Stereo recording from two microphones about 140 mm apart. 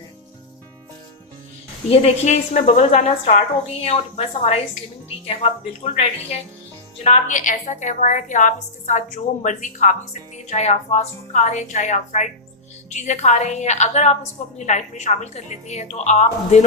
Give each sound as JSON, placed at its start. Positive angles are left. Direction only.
{"t": 1.9, "sound": "a woman's voice", "side_deg": 45}
{"t": 3.8, "sound": "speech", "side_deg": 45}
{"t": 7.0, "sound": "a woman's voice", "side_deg": 60}